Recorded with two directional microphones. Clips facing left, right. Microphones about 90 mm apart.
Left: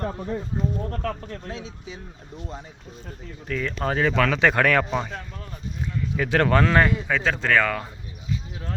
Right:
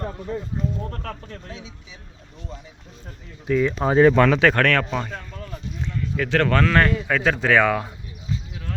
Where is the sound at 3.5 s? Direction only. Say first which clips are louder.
Right 6 dB; 10° right (ahead or behind).